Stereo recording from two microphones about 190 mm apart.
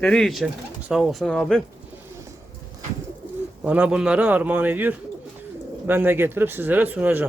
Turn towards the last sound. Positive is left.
turn(degrees=-10)  # may be behind; listen again after turning